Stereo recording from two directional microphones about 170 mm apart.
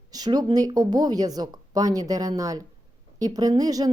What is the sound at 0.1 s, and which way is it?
A woman's voice, 25° right (ahead or behind).